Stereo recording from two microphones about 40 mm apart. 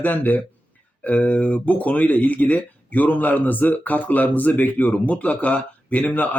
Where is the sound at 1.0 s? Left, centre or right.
Left.